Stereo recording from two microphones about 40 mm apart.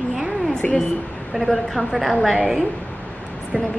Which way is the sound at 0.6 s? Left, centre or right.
Left.